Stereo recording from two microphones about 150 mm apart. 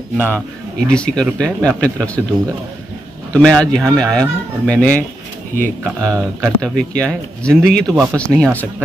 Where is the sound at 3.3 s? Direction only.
5° left (ahead or behind).